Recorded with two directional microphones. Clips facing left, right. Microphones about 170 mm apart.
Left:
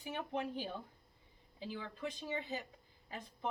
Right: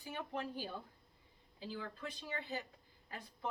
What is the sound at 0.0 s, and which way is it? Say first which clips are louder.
Speech: left 3 dB; 20° left (ahead or behind).